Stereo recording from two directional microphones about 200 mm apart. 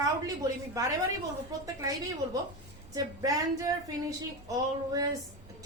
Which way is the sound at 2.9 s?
20° right (ahead or behind).